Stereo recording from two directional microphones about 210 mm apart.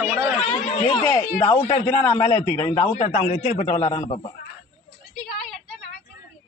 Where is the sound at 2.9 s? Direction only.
35° left (ahead or behind).